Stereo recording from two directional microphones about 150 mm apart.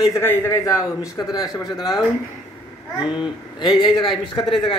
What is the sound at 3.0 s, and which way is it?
A man's voice, 35° left (ahead or behind).